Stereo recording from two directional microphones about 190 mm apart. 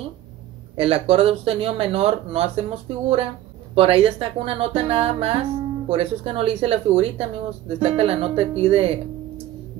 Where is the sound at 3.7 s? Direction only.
30° right (ahead or behind).